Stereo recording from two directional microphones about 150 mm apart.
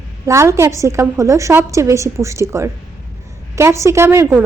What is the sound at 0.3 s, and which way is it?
A woman's voice, 20° right (ahead or behind).